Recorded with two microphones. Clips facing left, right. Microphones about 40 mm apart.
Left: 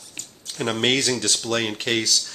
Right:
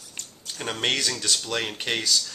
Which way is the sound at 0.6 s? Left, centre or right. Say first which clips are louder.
Left 5 dB; centre.